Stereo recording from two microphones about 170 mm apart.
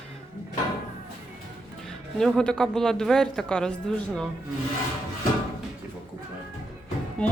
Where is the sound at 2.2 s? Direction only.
5° left (ahead or behind).